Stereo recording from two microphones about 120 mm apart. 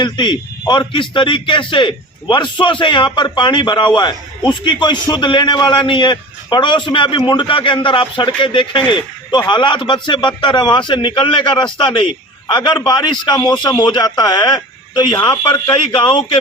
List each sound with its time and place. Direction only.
0.0 s a man's voice: 40° left (ahead or behind)